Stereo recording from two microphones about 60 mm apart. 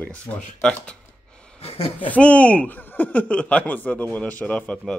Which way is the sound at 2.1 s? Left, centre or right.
Left.